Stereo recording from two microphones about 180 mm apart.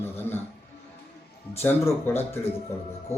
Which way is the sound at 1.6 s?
10° left (ahead or behind).